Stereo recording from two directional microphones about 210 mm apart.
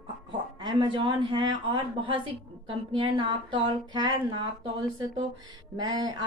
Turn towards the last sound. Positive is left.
turn(degrees=-20)  # may be behind; listen again after turning